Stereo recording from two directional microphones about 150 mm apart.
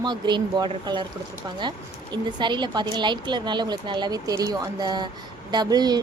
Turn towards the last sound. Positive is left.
turn(degrees=-25)  # may be behind; listen again after turning